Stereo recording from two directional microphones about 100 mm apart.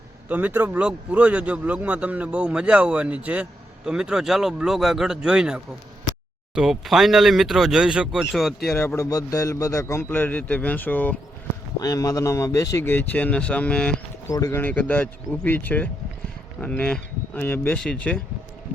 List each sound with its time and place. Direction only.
0.3 s speech: 15° right (ahead or behind)
9.0 s a man's voice: 35° left (ahead or behind); by 11.2 s 15° left (ahead or behind)
11.8 s a man's voice: 35° left (ahead or behind); by 13.9 s 10° left (ahead or behind)
14.3 s speech: 35° left (ahead or behind)
14.5 s a man's voice: 15° left (ahead or behind)
17.7 s speech: 10° left (ahead or behind)